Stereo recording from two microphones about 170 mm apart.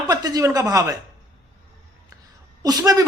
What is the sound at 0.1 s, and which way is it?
Speech, 20° right (ahead or behind).